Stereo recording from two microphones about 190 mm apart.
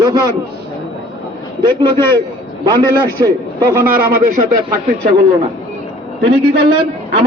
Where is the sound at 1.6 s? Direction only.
25° right (ahead or behind).